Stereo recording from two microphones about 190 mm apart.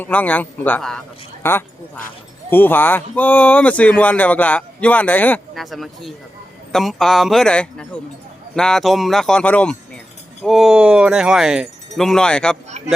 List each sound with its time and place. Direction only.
0.0 s speech: 10° left (ahead or behind)
12.8 s speech: 35° right (ahead or behind)